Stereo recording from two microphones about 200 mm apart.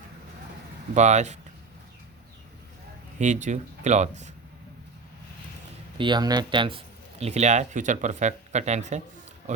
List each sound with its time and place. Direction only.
0.9 s speech: 35° right (ahead or behind)
3.2 s speech: 35° right (ahead or behind)
6.0 s speech: 20° right (ahead or behind)